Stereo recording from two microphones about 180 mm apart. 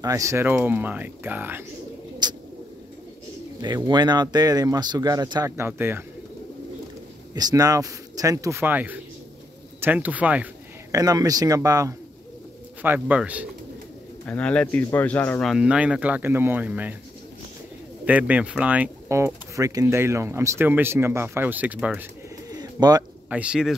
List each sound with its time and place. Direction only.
0.0 s speech: 20° right (ahead or behind)
2.2 s a sound: 25° right (ahead or behind)
3.6 s speech: 25° right (ahead or behind)
7.3 s speech: 20° right (ahead or behind)
10.9 s speech: 20° right (ahead or behind)
14.2 s speech: 5° left (ahead or behind)
15.4 s speech: 5° right (ahead or behind)
18.0 s speech: 10° right (ahead or behind)
22.5 s bird: 20° right (ahead or behind)
23.3 s speech: 5° right (ahead or behind)